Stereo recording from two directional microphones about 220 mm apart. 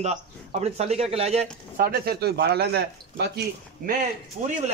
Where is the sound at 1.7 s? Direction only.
40° right (ahead or behind).